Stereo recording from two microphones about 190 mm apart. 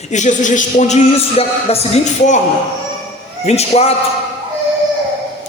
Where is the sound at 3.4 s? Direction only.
35° left (ahead or behind).